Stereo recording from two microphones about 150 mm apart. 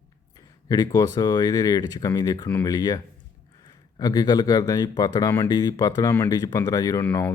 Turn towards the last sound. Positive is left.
turn(degrees=15)  # may be behind; listen again after turning